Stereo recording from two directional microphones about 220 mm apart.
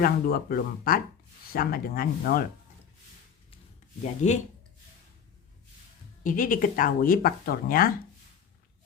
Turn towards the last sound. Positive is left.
turn(degrees=40)  # may be behind; listen again after turning